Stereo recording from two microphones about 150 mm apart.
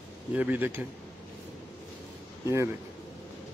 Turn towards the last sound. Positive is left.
turn(degrees=-20)  # may be behind; listen again after turning